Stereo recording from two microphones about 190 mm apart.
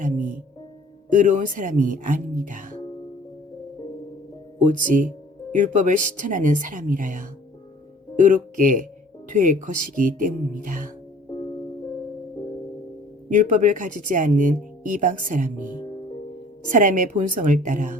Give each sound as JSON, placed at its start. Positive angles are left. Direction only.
{"t": 0.0, "sound": "music", "side_deg": -45}
{"t": 1.1, "sound": "speech", "side_deg": -45}
{"t": 4.6, "sound": "speech", "side_deg": -45}
{"t": 13.3, "sound": "speech", "side_deg": -45}